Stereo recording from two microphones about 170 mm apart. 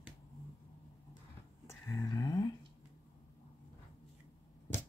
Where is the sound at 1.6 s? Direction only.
20° left (ahead or behind).